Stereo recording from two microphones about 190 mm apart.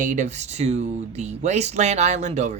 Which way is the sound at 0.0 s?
40° right (ahead or behind).